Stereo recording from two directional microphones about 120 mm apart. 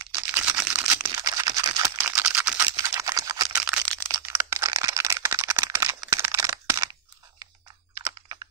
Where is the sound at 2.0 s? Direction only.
15° right (ahead or behind).